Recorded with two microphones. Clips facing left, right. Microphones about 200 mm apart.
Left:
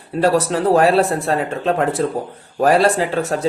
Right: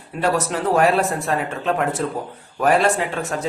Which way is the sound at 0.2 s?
35° left (ahead or behind).